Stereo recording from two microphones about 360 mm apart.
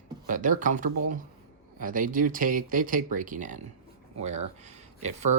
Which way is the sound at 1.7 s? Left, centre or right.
Right.